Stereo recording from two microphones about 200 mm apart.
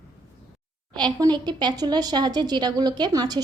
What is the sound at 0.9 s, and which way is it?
A woman's voice, 20° right (ahead or behind).